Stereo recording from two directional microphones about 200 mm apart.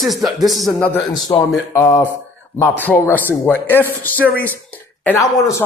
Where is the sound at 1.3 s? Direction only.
15° left (ahead or behind).